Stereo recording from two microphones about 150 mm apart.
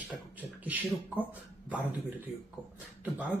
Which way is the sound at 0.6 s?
10° right (ahead or behind).